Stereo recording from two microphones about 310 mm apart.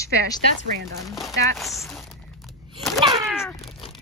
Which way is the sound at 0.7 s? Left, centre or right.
Right.